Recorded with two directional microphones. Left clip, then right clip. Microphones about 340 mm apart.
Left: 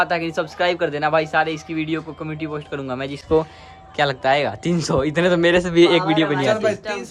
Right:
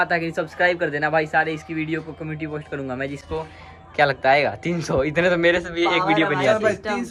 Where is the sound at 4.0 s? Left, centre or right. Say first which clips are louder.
Right 1 dB; centre.